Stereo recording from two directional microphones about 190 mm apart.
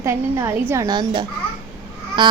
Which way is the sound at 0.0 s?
15° right (ahead or behind).